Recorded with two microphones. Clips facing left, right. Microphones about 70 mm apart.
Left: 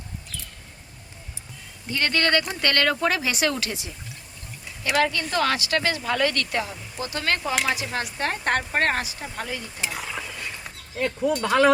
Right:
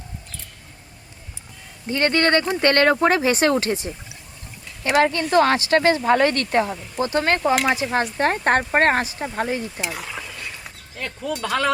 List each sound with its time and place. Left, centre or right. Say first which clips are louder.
1.9 s speech: right 4 dB; right
9.8 s a sound: right 1 dB; centre
10.9 s speech: left 5 dB; centre